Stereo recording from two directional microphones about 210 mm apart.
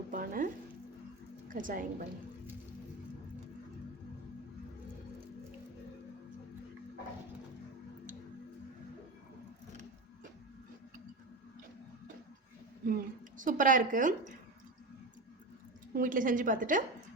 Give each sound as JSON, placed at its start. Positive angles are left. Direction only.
{"t": 0.1, "sound": "music", "side_deg": -40}
{"t": 1.5, "sound": "a woman's voice", "side_deg": -40}
{"t": 12.8, "sound": "a woman's voice", "side_deg": -40}
{"t": 16.0, "sound": "a woman's voice", "side_deg": -40}